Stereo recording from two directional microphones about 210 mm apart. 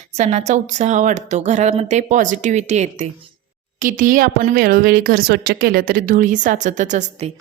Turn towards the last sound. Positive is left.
turn(degrees=-35)  # may be behind; listen again after turning